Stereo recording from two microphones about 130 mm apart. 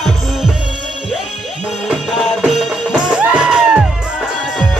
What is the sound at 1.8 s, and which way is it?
Music, centre (ahead or behind).